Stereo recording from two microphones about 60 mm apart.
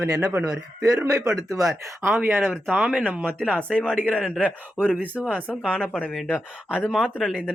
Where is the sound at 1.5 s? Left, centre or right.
Right.